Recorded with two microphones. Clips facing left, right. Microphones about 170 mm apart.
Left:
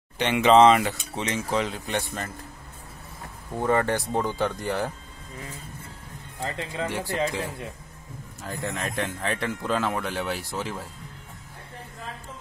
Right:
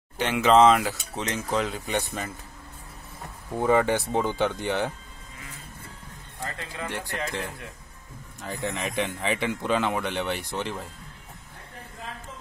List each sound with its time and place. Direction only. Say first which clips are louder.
0.2 s speech: left 2 dB; 5° right (ahead or behind)
3.5 s speech: right 2 dB; 5° right (ahead or behind)
6.4 s speech: left 5 dB; 25° left (ahead or behind)
6.9 s speech: left 4 dB; 10° left (ahead or behind)
8.4 s speech: right 1 dB; centre (ahead or behind)